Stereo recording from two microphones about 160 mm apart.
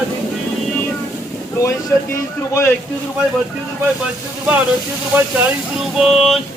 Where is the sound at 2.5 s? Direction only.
15° left (ahead or behind).